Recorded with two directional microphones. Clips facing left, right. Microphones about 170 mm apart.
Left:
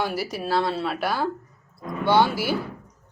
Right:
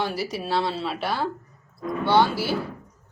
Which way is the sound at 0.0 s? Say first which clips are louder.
Left 1 dB; centre (ahead or behind).